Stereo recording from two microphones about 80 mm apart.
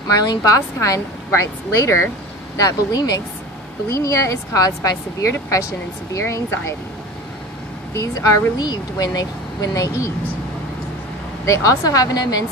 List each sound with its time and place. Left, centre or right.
0.1 s speech: left
2.5 s speech: left
3.9 s speech: left
6.1 s speech: left
7.9 s speech: left
11.4 s speech: left